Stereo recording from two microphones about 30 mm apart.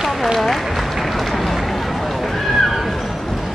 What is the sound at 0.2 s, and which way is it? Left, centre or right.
Speech, centre.